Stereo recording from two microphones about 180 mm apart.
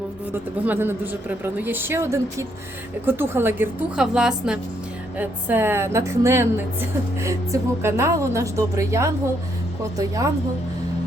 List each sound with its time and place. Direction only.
0.6 s a woman's voice: 10° right (ahead or behind)